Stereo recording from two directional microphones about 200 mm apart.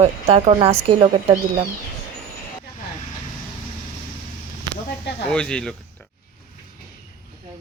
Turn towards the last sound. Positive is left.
turn(degrees=5)  # may be behind; listen again after turning